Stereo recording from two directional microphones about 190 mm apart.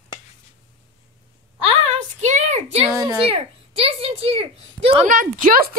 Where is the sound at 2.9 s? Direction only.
20° right (ahead or behind).